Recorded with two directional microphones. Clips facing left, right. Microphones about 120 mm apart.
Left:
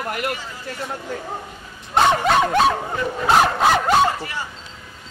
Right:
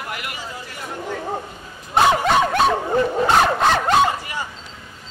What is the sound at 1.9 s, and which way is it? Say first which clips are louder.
Dog: even; centre (ahead or behind).